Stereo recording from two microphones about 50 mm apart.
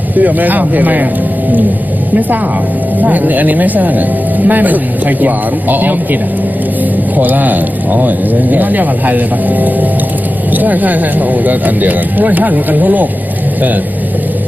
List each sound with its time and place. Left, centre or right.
0.2 s speech: right
3.0 s speech: right
7.2 s speech: right